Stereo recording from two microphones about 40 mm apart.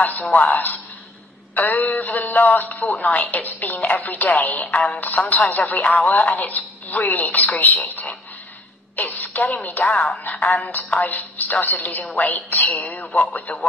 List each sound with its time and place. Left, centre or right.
0.0 s speech: left